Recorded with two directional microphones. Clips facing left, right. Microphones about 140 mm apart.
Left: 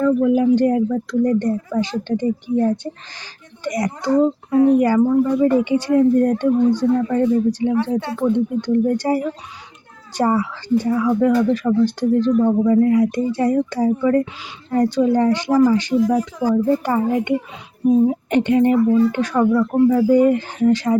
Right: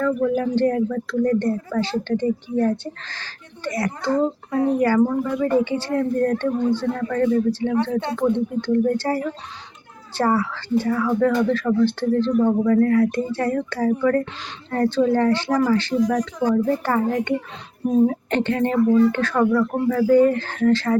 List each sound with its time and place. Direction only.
0.0 s speech: 15° left (ahead or behind)
16.0 s speech: 5° left (ahead or behind)
17.8 s speech: 5° left (ahead or behind)
18.1 s speech: 15° left (ahead or behind)